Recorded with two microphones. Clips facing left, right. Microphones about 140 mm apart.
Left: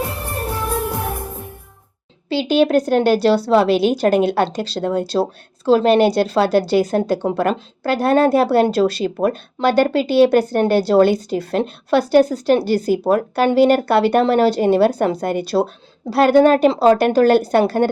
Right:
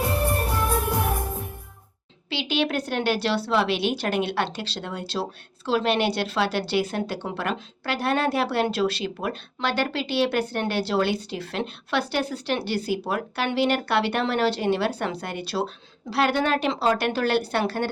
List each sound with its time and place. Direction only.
2.3 s a woman's voice: 45° left (ahead or behind)